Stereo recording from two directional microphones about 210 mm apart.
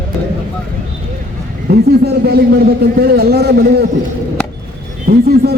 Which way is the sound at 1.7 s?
50° right (ahead or behind).